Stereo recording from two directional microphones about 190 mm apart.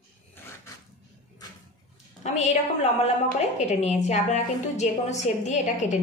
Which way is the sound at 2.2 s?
35° left (ahead or behind).